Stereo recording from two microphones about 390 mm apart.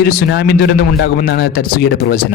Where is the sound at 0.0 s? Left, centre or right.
Left.